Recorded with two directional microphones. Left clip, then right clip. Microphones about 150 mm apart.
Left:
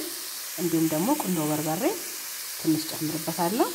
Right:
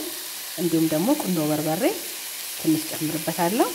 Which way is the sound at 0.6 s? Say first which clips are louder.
Right 3 dB; 15° right (ahead or behind).